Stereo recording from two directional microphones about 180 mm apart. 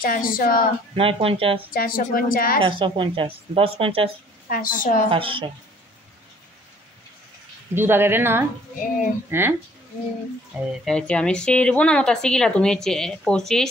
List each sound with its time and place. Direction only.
0.0 s a woman's voice: 50° left (ahead or behind)
0.9 s speech: 30° right (ahead or behind)
1.7 s a woman's voice: 55° left (ahead or behind)
2.6 s speech: 25° right (ahead or behind)
4.5 s a woman's voice: 50° left (ahead or behind)
5.1 s a woman's voice: 30° right (ahead or behind)
7.7 s speech: 10° right (ahead or behind)
10.9 s speech: 5° left (ahead or behind)